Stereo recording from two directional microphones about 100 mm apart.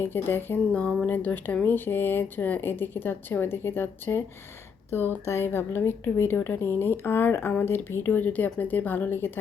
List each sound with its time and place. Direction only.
0.0 s speech: 20° left (ahead or behind)
0.7 s speech: 10° left (ahead or behind)